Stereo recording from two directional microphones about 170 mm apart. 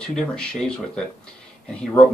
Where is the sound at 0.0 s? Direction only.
5° left (ahead or behind).